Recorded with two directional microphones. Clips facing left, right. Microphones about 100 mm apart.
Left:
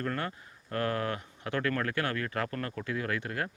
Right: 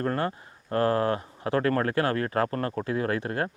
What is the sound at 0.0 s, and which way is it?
Speech, 35° right (ahead or behind).